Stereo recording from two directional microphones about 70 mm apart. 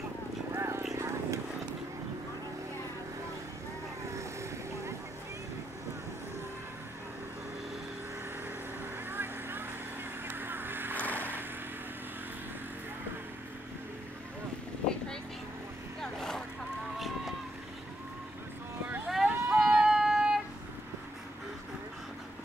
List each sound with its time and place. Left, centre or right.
0.6 s clip-clop: right
0.9 s vehicle: right
4.1 s vehicle: right
9.1 s vehicle: right
10.2 s honk: right
11.0 s vehicle: left
16.0 s vehicle: centre
19.0 s vehicle: centre
19.9 s child singing: centre